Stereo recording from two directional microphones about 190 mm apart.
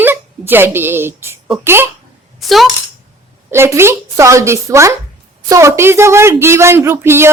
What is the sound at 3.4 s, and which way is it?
A woman's voice, 15° right (ahead or behind).